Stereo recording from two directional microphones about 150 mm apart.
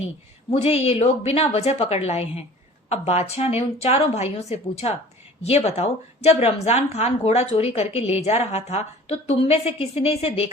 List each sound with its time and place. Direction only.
0.5 s a woman's voice: 40° left (ahead or behind)